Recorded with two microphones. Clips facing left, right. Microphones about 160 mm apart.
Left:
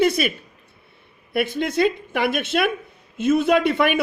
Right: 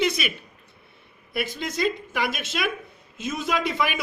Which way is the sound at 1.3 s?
55° left (ahead or behind).